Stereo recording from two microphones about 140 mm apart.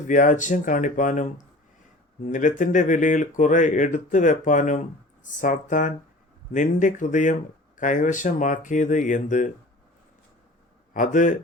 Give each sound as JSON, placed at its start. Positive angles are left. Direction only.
{"t": 0.1, "sound": "speech", "side_deg": 65}
{"t": 10.9, "sound": "speech", "side_deg": 65}